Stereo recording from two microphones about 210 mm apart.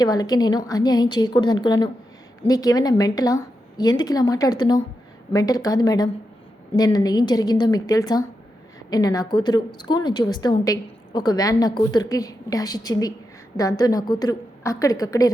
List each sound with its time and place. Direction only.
0.0 s a woman's voice: 20° left (ahead or behind)